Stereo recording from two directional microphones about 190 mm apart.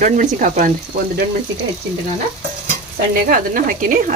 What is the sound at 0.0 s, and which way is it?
Speech, 40° right (ahead or behind).